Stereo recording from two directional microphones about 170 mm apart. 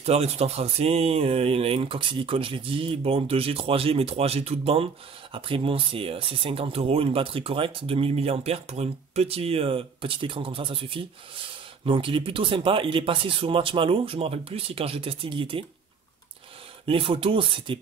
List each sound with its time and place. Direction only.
0.0 s speech: 35° right (ahead or behind)
16.8 s speech: 30° right (ahead or behind)